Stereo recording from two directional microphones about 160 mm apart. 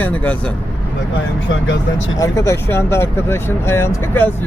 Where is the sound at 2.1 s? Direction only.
20° left (ahead or behind).